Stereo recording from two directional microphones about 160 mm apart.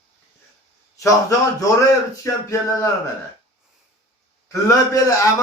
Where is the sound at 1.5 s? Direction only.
20° left (ahead or behind).